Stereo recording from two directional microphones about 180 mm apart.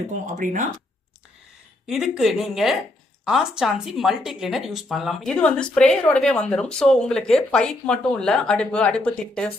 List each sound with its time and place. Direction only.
0.4 s speech: 45° right (ahead or behind)
1.9 s speech: centre (ahead or behind)